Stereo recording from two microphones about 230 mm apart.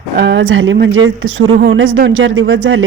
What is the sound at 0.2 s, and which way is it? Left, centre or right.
Speech, right.